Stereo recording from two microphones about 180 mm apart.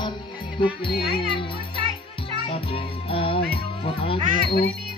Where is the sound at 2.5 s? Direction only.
30° left (ahead or behind).